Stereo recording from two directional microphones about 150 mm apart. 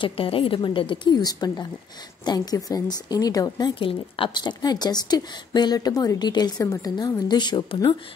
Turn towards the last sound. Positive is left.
turn(degrees=30)  # may be behind; listen again after turning